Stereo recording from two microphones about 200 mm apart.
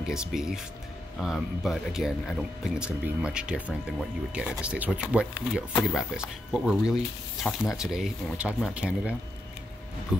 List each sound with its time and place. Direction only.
0.1 s speech: 5° right (ahead or behind)